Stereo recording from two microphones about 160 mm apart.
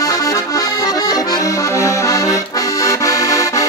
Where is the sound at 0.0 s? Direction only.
20° left (ahead or behind).